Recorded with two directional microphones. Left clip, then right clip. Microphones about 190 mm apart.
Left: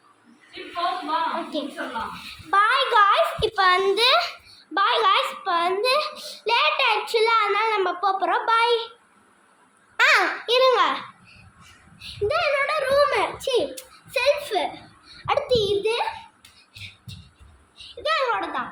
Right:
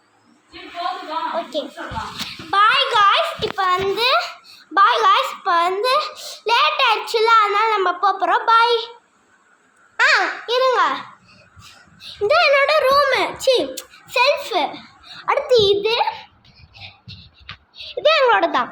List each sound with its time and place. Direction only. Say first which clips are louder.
1.5 s a child's voice: right 4 dB; centre (ahead or behind)
2.5 s a sound: right 4 dB; 5° right (ahead or behind)
10.0 s babbling: right 2 dB; centre (ahead or behind)
12.3 s a child's voice: right 9 dB; 50° right (ahead or behind)
14.1 s a child's voice: right 5 dB; 35° right (ahead or behind)
15.3 s a child's voice: right 4 dB; 5° right (ahead or behind)
15.5 s a child's voice: right 9 dB; 45° right (ahead or behind)
17.7 s a child's voice: right 8 dB; 45° right (ahead or behind)